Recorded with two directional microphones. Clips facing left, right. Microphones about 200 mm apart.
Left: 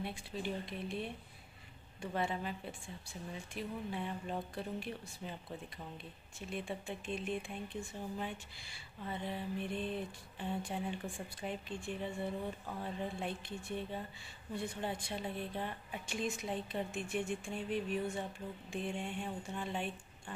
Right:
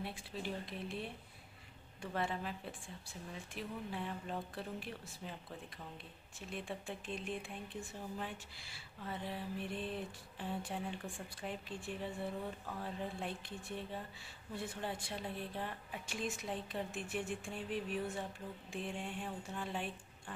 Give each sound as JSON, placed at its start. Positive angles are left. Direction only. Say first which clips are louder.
{"t": 0.0, "sound": "speech", "louder": "left 3 dB", "side_deg": 0}
{"t": 6.5, "sound": "speech", "louder": "left 2 dB", "side_deg": 0}